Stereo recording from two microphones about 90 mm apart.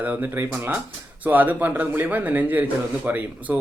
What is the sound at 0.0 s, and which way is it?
A man's voice, 20° right (ahead or behind).